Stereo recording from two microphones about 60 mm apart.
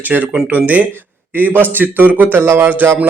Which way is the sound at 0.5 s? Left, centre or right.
Right.